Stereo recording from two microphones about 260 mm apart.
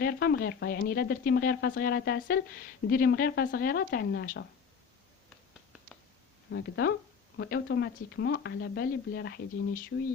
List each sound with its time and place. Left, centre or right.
0.0 s speech: left
6.5 s speech: left